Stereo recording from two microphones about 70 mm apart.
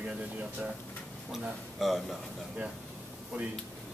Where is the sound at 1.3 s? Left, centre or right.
Centre.